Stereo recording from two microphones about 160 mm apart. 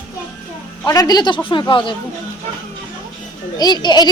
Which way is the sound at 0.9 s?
25° left (ahead or behind).